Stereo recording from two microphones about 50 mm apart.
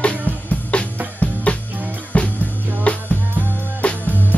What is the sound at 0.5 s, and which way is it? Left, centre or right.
Music, left.